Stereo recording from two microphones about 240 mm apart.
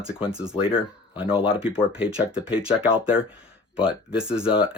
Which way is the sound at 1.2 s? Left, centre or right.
Left.